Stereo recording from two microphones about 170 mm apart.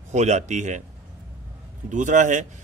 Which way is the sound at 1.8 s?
45° right (ahead or behind).